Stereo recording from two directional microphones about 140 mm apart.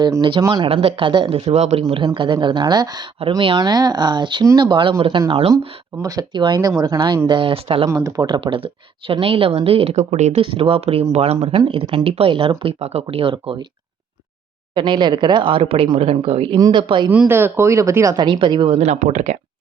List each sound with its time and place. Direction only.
0.0 s speech: 35° right (ahead or behind)
0.7 s speech: 45° right (ahead or behind)
1.5 s speech: 50° right (ahead or behind)
2.1 s speech: 35° right (ahead or behind)
6.0 s speech: 25° right (ahead or behind); by 7.9 s 40° right (ahead or behind)
7.9 s speech: 25° right (ahead or behind)
14.8 s speech: 35° right (ahead or behind)
16.6 s speech: 25° right (ahead or behind)
16.8 s speech: 35° right (ahead or behind)
17.1 s speech: 15° right (ahead or behind); by 19.4 s 55° right (ahead or behind)